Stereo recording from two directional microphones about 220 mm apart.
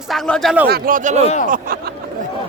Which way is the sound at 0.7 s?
40° right (ahead or behind).